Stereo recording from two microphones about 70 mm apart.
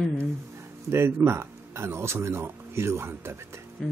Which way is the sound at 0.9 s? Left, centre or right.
Right.